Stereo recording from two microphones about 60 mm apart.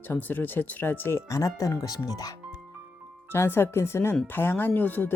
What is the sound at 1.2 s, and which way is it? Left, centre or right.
Speech, left.